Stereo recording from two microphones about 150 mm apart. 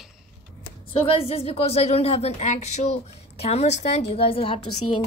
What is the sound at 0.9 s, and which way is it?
A woman's voice, 40° left (ahead or behind).